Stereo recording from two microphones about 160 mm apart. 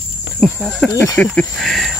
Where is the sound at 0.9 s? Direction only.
15° left (ahead or behind).